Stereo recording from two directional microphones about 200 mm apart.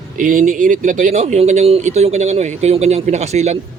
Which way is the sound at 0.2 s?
40° right (ahead or behind).